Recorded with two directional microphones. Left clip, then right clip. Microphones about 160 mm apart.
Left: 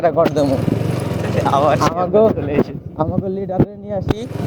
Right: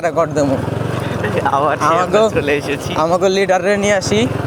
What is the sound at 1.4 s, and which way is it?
Speech, 25° right (ahead or behind).